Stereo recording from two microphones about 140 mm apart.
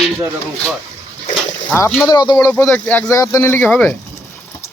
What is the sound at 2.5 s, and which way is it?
Speech, 15° left (ahead or behind).